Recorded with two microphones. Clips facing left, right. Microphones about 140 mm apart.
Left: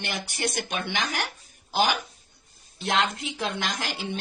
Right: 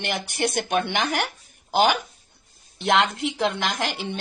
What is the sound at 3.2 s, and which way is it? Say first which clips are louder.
Speech: right 6 dB; 70° right (ahead or behind).